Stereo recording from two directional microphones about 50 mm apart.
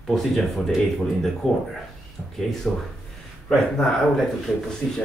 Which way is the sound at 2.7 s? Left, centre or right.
Centre.